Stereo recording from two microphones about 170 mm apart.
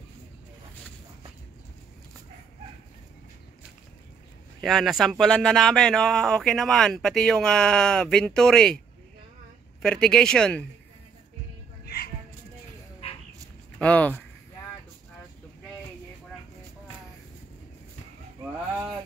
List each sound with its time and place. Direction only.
4.6 s speech: centre (ahead or behind)
9.8 s speech: 5° left (ahead or behind)
11.8 s music: 65° left (ahead or behind)
13.7 s speech: 10° left (ahead or behind)